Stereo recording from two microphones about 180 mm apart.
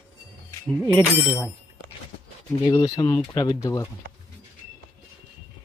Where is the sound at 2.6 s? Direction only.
20° left (ahead or behind).